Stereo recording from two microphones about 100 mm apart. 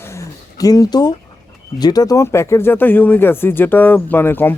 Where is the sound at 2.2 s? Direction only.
25° left (ahead or behind).